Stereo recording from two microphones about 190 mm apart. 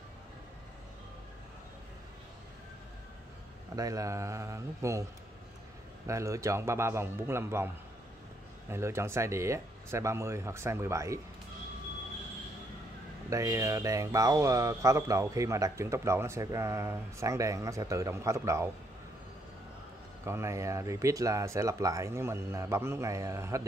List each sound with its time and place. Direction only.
3.7 s speech: 15° right (ahead or behind)
6.0 s speech: 15° right (ahead or behind)
13.3 s speech: 15° right (ahead or behind)
20.2 s speech: 15° right (ahead or behind)